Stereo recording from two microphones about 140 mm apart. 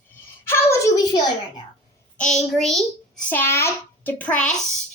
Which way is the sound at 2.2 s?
5° left (ahead or behind).